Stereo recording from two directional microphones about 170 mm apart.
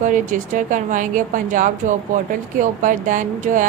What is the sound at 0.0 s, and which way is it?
A woman's voice, 50° right (ahead or behind).